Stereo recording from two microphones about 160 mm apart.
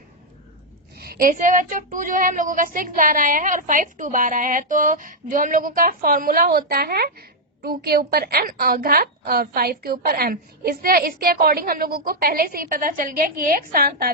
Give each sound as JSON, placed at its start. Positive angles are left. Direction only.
{"t": 0.9, "sound": "child singing", "side_deg": -75}